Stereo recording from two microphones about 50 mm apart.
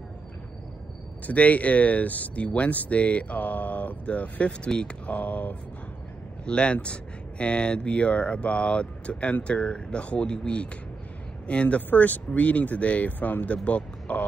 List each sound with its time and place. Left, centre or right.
1.2 s speech: left